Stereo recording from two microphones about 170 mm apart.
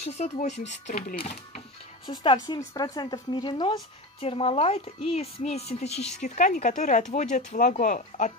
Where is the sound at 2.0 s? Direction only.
25° left (ahead or behind).